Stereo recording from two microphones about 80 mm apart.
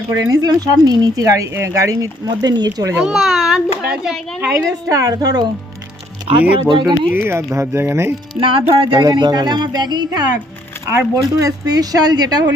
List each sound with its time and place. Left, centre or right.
0.1 s speech: right
2.2 s speech: right
3.0 s a child's voice: centre
4.4 s speech: right
6.7 s music: right
7.1 s speech: right
8.4 s music: right
9.0 s speech: right
11.1 s speech: right